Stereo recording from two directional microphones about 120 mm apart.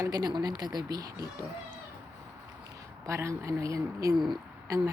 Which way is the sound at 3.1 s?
25° right (ahead or behind).